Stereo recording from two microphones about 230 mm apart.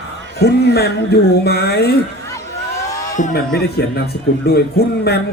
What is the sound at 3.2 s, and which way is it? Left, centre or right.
Speech, left.